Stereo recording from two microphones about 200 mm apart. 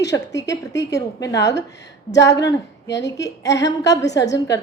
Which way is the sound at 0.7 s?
15° left (ahead or behind).